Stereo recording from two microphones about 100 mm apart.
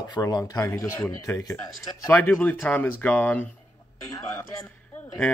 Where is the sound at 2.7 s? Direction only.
20° left (ahead or behind).